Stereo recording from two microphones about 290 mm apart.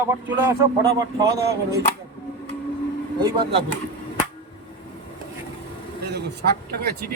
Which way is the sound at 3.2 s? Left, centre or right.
Centre.